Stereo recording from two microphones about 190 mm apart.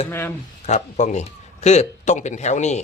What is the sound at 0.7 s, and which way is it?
A man's voice, 40° left (ahead or behind).